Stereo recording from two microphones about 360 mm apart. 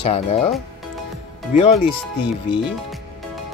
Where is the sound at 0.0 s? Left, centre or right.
Centre.